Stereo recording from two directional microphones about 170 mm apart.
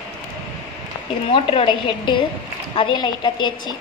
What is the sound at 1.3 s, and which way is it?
A woman's voice, 30° left (ahead or behind).